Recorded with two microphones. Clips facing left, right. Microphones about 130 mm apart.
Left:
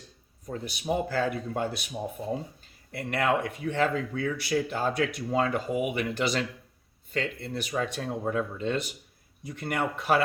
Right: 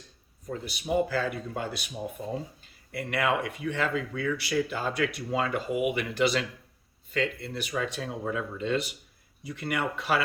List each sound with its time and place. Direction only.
0.6 s speech: 50° left (ahead or behind)
2.9 s speech: 50° left (ahead or behind)